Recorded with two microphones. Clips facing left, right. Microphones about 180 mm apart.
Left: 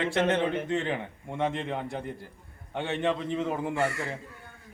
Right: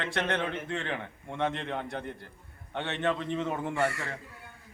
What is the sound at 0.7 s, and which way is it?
A man's voice, 20° left (ahead or behind).